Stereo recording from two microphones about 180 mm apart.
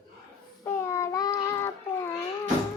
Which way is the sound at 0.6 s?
15° left (ahead or behind).